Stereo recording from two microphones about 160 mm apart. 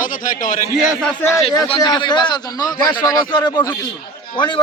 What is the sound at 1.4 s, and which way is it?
A man's voice, 30° left (ahead or behind).